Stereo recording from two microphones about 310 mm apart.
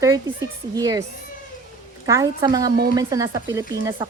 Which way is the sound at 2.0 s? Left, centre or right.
Centre.